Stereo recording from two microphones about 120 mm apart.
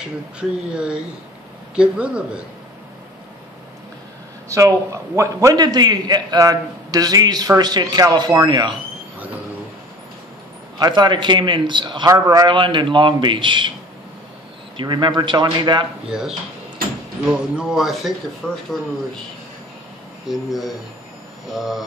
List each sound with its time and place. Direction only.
0.0 s speech: 5° right (ahead or behind)
4.5 s a man's voice: 25° right (ahead or behind)
10.8 s a man's voice: 35° right (ahead or behind)
14.8 s a man's voice: 40° right (ahead or behind)
16.1 s speech: 5° right (ahead or behind)
20.2 s speech: centre (ahead or behind)